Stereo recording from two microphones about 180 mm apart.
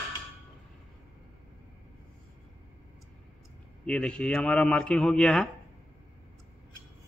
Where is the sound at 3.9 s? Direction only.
5° left (ahead or behind).